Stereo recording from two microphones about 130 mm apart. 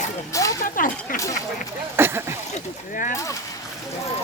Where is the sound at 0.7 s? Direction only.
90° left.